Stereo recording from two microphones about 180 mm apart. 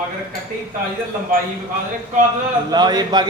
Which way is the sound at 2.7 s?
25° right (ahead or behind).